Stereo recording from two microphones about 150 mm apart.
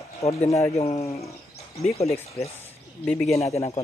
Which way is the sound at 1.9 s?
45° left (ahead or behind).